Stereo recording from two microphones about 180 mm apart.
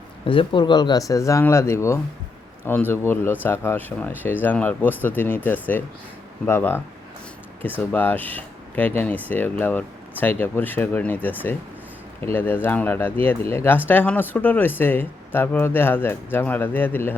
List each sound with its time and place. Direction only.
0.3 s speech: 25° left (ahead or behind); by 6.8 s 10° left (ahead or behind)
7.9 s speech: 10° left (ahead or behind)